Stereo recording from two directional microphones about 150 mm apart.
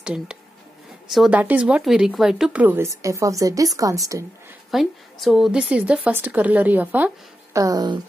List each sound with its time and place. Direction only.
0.0 s a woman's voice: 5° right (ahead or behind); by 4.0 s 20° right (ahead or behind)
4.6 s a woman's voice: centre (ahead or behind)
7.5 s speech: 25° right (ahead or behind)